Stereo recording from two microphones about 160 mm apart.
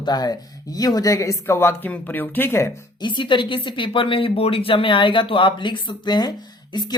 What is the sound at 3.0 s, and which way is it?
A woman's voice, 30° left (ahead or behind).